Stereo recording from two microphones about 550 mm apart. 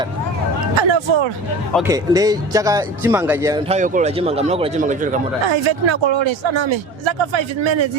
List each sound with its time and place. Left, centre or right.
0.8 s speech: right
1.7 s speech: centre
5.5 s speech: right